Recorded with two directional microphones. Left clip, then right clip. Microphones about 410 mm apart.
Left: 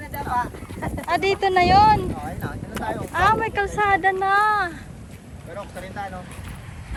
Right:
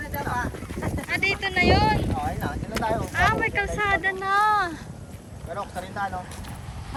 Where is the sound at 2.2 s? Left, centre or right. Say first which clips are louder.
Right 3 dB; right.